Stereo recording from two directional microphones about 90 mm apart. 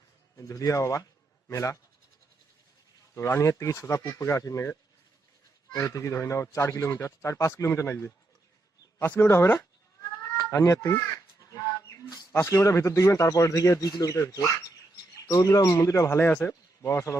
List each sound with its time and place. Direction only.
0.3 s speech: 40° left (ahead or behind)
3.2 s speech: 30° left (ahead or behind)
10.5 s a sound: 35° left (ahead or behind)
12.1 s speech: 35° left (ahead or behind)